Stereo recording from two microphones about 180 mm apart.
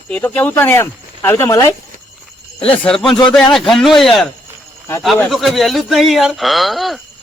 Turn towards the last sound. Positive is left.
turn(degrees=0)  # may be behind; listen again after turning